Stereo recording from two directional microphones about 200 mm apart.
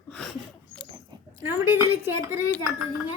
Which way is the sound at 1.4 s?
10° right (ahead or behind).